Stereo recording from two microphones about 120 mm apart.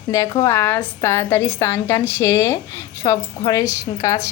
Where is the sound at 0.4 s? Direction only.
20° left (ahead or behind).